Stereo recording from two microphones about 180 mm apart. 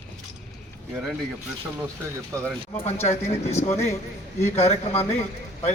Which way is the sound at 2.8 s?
35° left (ahead or behind).